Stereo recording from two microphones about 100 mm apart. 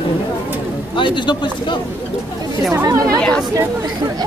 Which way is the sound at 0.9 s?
55° left (ahead or behind).